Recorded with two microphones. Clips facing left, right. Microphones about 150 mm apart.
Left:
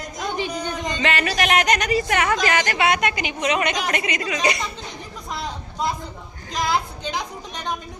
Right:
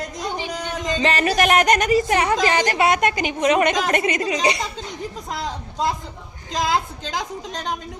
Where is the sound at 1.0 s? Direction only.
40° right (ahead or behind).